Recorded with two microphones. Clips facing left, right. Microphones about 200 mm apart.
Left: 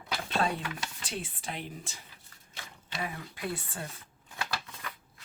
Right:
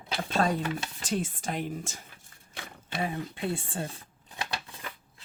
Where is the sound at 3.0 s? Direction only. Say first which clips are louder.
Right 6 dB; 25° right (ahead or behind).